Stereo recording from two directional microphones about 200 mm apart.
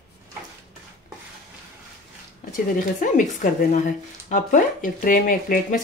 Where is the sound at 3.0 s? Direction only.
40° left (ahead or behind).